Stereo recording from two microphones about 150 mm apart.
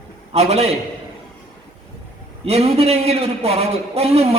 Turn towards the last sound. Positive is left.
turn(degrees=-40)  # may be behind; listen again after turning